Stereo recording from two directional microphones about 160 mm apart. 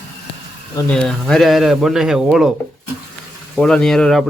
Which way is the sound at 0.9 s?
5° left (ahead or behind).